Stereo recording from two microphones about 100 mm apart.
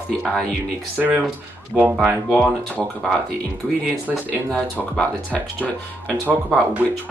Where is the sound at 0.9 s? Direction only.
15° right (ahead or behind).